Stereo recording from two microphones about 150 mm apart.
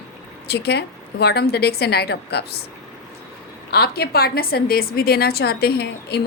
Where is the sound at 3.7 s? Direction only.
90° left.